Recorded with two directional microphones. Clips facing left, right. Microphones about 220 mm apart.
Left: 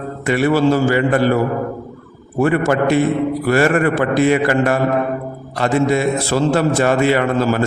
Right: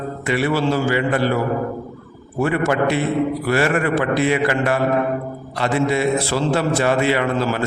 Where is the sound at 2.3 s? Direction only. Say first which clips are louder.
Left 3 dB; 50° left (ahead or behind).